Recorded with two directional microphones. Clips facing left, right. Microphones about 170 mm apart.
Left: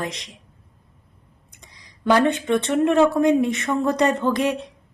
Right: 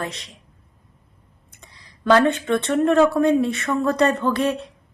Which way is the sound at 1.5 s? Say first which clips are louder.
Right 2 dB; 15° left (ahead or behind).